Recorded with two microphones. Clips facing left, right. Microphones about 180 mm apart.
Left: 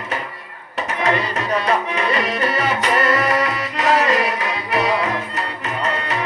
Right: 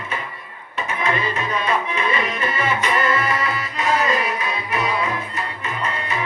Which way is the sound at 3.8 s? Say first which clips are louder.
Left 3 dB; 85° left.